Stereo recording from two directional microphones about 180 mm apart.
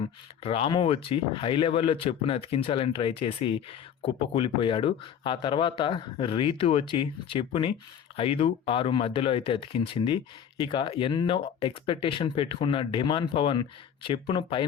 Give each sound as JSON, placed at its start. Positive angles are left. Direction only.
{"t": 0.4, "sound": "speech", "side_deg": 30}